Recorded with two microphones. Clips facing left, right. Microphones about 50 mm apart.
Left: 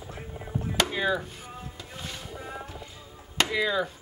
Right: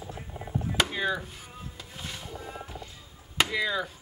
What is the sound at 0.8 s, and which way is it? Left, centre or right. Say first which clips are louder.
Chop: left 2 dB; centre.